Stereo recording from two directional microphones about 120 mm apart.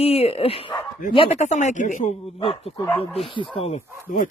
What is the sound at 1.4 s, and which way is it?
Speech, 75° left (ahead or behind).